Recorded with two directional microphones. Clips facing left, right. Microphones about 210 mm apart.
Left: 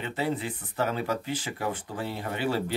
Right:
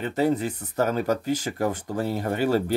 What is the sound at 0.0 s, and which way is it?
Speech, 45° right (ahead or behind).